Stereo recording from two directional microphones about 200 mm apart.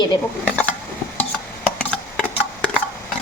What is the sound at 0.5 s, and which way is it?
Stir, 5° left (ahead or behind).